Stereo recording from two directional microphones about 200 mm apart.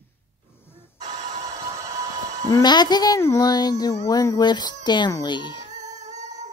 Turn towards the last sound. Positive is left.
turn(degrees=-35)  # may be behind; listen again after turning